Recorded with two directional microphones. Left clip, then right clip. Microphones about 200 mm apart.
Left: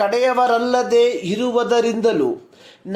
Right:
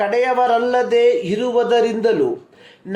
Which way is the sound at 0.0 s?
30° left (ahead or behind).